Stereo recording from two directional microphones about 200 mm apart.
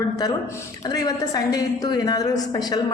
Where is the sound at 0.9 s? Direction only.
20° left (ahead or behind).